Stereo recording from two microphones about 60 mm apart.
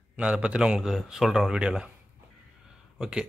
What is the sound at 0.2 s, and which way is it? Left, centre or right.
Speech, centre.